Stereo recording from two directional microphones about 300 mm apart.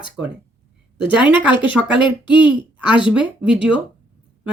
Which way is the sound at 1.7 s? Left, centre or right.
Centre.